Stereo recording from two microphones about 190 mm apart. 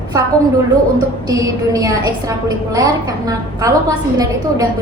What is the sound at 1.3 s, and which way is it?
A woman's voice, 15° right (ahead or behind).